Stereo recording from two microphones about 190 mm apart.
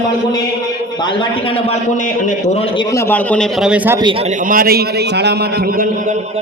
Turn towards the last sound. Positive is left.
turn(degrees=-55)  # may be behind; listen again after turning